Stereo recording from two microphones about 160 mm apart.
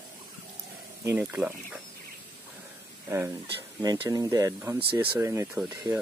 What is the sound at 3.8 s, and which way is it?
Speech, 25° right (ahead or behind).